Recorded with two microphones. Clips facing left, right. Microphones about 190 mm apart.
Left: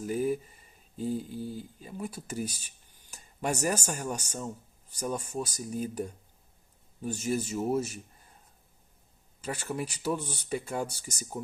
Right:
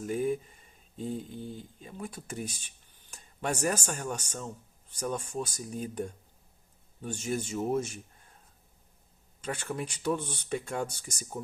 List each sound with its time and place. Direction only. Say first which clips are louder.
0.0 s speech: left 1 dB; 5° left (ahead or behind)
9.4 s speech: left 1 dB; 10° left (ahead or behind)